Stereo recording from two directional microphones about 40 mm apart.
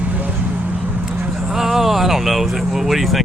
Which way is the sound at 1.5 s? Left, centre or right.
Centre.